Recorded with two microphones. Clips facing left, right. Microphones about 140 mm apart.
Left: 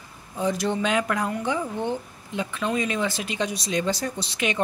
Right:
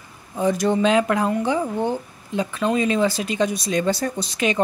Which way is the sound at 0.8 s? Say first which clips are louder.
Right 7 dB; 30° right (ahead or behind).